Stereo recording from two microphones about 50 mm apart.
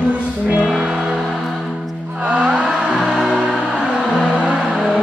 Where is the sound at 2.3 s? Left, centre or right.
Right.